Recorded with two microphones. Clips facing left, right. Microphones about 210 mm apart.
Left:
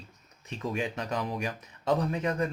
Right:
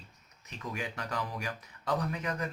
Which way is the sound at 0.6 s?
25° left (ahead or behind).